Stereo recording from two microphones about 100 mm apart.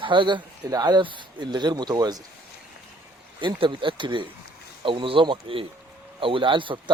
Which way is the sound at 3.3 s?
55° right (ahead or behind).